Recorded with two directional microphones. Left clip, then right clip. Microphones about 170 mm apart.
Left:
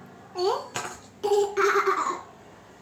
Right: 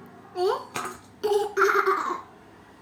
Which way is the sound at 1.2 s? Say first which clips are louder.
Even; 35° right (ahead or behind).